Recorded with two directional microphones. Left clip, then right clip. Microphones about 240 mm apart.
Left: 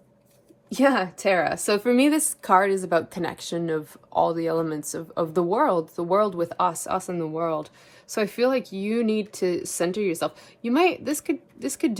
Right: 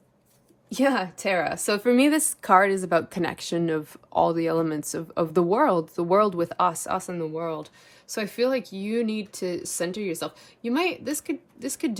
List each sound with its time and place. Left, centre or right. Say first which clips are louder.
0.7 s speech: left 3 dB; centre
2.4 s speech: right 1 dB; right
6.7 s speech: left 1 dB; centre